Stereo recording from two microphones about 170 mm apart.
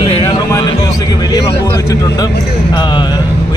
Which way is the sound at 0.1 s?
30° left (ahead or behind).